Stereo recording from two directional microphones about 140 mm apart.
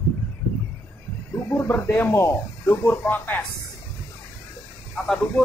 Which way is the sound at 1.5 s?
15° left (ahead or behind).